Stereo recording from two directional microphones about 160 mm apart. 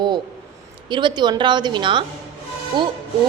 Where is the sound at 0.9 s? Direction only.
30° right (ahead or behind).